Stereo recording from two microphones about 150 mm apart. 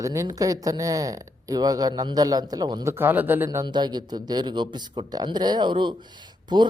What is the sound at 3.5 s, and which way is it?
A woman's voice, 25° right (ahead or behind).